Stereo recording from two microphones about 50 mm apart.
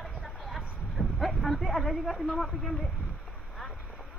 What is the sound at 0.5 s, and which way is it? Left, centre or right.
Speech, centre.